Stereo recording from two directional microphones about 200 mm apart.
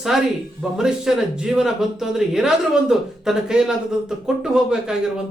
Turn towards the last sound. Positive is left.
turn(degrees=-5)  # may be behind; listen again after turning